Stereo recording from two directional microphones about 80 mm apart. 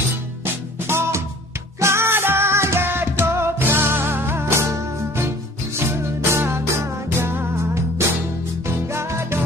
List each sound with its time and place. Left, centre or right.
0.4 s music: right